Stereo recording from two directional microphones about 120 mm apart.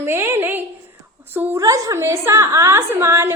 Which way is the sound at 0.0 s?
20° right (ahead or behind).